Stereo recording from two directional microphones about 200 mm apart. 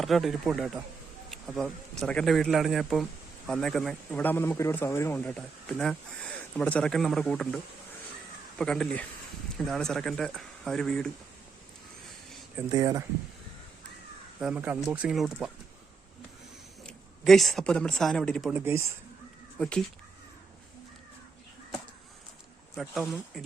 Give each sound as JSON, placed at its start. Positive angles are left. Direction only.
{"t": 0.0, "sound": "a man's voice", "side_deg": 0}
{"t": 12.7, "sound": "speech", "side_deg": -20}
{"t": 14.4, "sound": "a man's voice", "side_deg": -5}
{"t": 16.8, "sound": "speech", "side_deg": 0}
{"t": 22.8, "sound": "a man's voice", "side_deg": 0}